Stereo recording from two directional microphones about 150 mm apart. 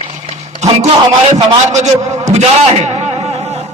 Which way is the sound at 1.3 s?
50° right (ahead or behind).